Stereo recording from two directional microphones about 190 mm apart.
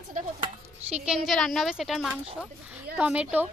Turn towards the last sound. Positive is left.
turn(degrees=-5)  # may be behind; listen again after turning